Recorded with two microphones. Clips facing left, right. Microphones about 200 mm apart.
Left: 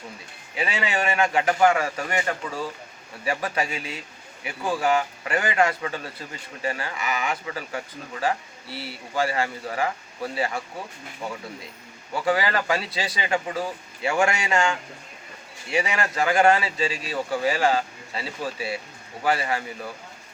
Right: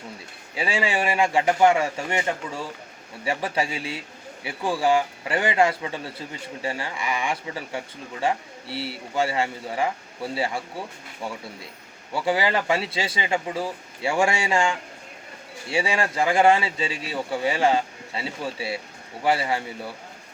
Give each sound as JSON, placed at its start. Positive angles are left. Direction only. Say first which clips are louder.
{"t": 0.5, "sound": "speech", "louder": "right 2 dB", "side_deg": -25}
{"t": 12.1, "sound": "speech", "louder": "even", "side_deg": -25}
{"t": 15.7, "sound": "speech", "louder": "right 1 dB", "side_deg": -30}